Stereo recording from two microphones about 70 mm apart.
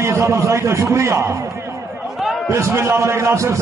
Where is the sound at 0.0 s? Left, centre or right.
Right.